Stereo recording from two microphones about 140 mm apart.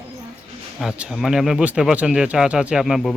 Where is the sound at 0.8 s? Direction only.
5° right (ahead or behind).